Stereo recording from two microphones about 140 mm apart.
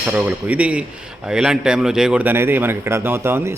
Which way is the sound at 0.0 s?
10° right (ahead or behind).